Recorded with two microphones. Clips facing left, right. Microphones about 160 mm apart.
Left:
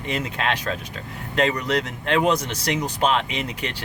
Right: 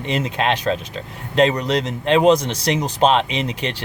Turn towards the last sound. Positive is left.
turn(degrees=-20)  # may be behind; listen again after turning